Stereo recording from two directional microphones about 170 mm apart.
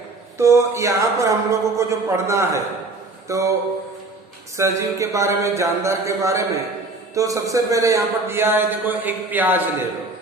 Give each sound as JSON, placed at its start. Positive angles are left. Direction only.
{"t": 0.3, "sound": "a man's voice", "side_deg": -15}
{"t": 3.2, "sound": "a sound", "side_deg": -20}
{"t": 4.5, "sound": "a man's voice", "side_deg": -15}